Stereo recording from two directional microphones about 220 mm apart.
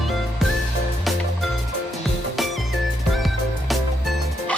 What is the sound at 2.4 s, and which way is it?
Music, centre (ahead or behind).